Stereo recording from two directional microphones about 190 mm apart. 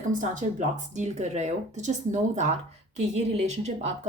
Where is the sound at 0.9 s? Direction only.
40° right (ahead or behind).